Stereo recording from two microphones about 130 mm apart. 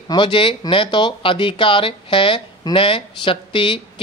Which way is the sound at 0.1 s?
40° left (ahead or behind).